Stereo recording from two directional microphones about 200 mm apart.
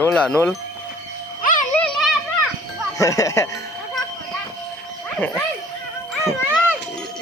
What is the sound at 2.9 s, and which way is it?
Speech, 15° left (ahead or behind).